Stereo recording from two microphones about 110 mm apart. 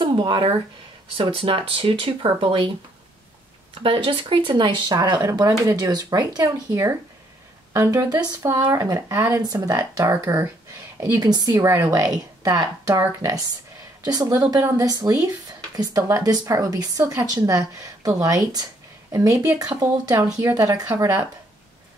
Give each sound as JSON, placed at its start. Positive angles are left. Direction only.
{"t": 0.0, "sound": "speech", "side_deg": -50}
{"t": 3.7, "sound": "speech", "side_deg": -50}
{"t": 4.9, "sound": "a woman's voice", "side_deg": -35}
{"t": 9.1, "sound": "speech", "side_deg": -20}
{"t": 9.4, "sound": "a woman's voice", "side_deg": -35}